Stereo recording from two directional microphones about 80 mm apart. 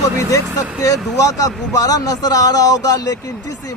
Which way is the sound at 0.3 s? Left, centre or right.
Left.